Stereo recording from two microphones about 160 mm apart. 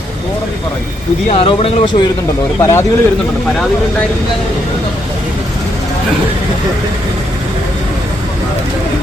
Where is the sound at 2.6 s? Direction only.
20° left (ahead or behind).